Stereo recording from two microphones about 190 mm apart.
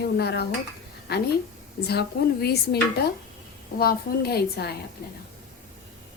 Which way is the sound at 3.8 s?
55° left (ahead or behind).